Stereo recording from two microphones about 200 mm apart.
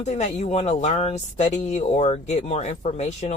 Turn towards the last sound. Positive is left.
turn(degrees=35)  # may be behind; listen again after turning